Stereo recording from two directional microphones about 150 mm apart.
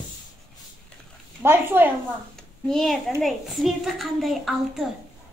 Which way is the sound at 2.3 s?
5° left (ahead or behind).